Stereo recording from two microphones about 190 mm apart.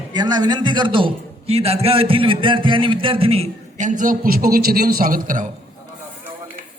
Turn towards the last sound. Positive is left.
turn(degrees=-45)  # may be behind; listen again after turning